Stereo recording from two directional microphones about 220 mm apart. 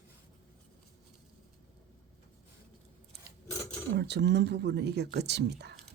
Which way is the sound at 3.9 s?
50° right (ahead or behind).